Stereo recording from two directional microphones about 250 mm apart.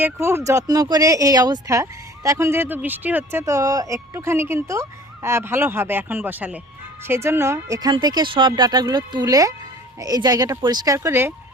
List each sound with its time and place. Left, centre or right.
0.0 s speech: centre